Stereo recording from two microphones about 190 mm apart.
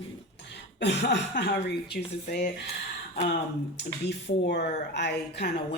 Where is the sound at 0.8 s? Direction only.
65° left (ahead or behind).